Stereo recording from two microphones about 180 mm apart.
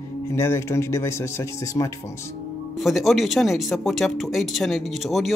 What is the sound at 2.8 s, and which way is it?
Speech, centre (ahead or behind).